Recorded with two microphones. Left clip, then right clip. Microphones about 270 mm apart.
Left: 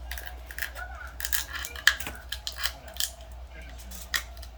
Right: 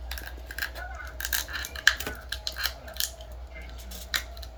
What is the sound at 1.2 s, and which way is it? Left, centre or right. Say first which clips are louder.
Scissors: right 2 dB; centre.